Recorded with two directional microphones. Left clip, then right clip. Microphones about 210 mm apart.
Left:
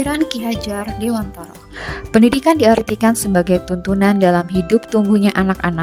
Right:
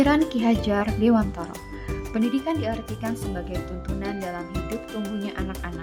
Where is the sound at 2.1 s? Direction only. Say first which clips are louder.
Left 14 dB; 55° left (ahead or behind).